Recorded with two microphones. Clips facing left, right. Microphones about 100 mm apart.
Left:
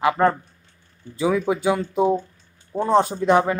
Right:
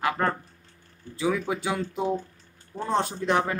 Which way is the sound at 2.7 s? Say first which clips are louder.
Left 9 dB; 40° left (ahead or behind).